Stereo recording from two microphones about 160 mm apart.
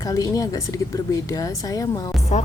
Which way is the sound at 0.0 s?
20° left (ahead or behind).